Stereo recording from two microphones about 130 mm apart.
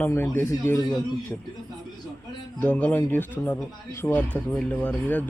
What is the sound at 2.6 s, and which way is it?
Speech, 10° left (ahead or behind).